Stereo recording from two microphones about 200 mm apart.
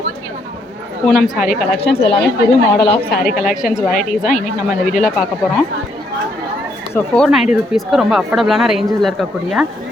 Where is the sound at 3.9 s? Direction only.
45° left (ahead or behind).